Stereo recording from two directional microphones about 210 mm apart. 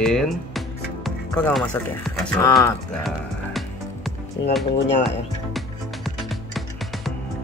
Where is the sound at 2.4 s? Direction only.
15° left (ahead or behind).